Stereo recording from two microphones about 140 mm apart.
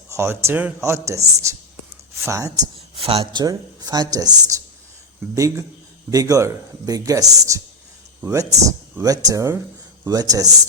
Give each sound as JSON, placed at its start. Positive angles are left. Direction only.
{"t": 0.1, "sound": "speech", "side_deg": -20}
{"t": 2.9, "sound": "speech", "side_deg": -45}
{"t": 3.4, "sound": "speech", "side_deg": -30}